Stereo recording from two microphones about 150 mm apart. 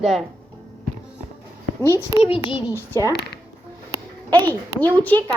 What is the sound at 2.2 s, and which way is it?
Speech, 40° left (ahead or behind).